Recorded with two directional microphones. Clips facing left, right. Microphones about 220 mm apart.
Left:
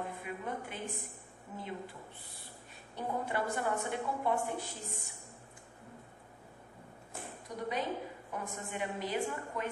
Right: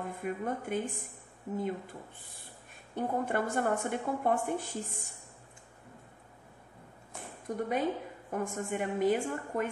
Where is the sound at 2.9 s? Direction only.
50° right (ahead or behind).